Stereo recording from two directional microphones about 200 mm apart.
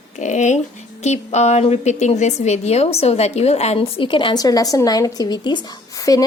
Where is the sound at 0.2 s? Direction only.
35° left (ahead or behind).